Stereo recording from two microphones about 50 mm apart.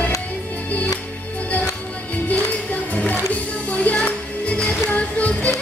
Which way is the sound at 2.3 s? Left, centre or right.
Left.